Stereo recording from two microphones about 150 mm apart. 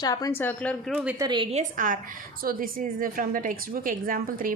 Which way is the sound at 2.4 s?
75° right (ahead or behind).